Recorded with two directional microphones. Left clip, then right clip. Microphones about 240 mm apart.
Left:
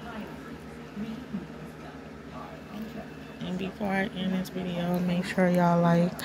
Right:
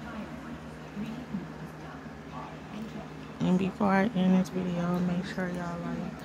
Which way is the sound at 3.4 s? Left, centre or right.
Right.